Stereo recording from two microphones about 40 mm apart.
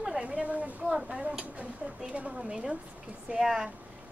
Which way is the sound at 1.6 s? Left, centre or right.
Right.